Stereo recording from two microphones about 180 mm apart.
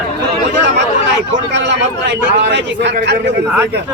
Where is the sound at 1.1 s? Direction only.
75° right (ahead or behind).